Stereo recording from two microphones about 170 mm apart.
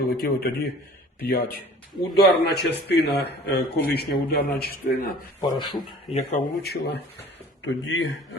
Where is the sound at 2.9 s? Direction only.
75° left (ahead or behind).